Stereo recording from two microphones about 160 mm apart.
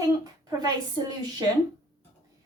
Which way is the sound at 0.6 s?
25° right (ahead or behind).